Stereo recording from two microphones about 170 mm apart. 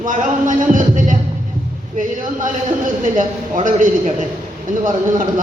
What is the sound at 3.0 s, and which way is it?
A man's voice, 50° right (ahead or behind).